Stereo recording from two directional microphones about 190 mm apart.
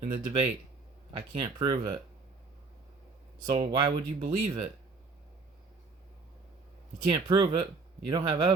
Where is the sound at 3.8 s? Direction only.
25° right (ahead or behind).